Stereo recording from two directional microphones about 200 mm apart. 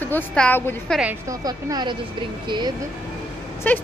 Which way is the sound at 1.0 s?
10° right (ahead or behind).